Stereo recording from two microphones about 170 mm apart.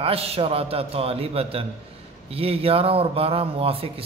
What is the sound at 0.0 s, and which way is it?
A man's voice, 35° right (ahead or behind).